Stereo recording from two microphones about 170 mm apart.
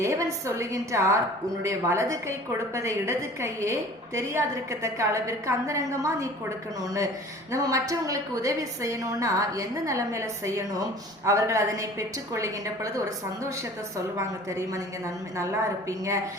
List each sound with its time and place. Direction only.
0.0 s a woman's voice: 15° right (ahead or behind)